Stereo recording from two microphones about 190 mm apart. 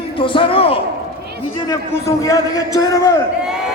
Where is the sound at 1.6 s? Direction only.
20° left (ahead or behind).